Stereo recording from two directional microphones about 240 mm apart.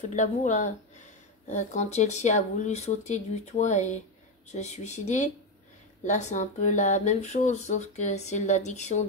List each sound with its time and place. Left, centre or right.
0.0 s speech: left